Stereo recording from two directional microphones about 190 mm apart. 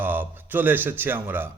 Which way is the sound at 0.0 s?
10° right (ahead or behind).